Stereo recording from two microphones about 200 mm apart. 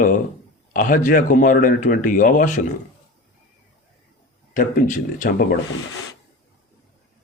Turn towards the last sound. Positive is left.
turn(degrees=45)  # may be behind; listen again after turning